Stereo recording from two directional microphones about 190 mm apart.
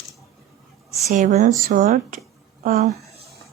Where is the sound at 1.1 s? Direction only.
40° right (ahead or behind).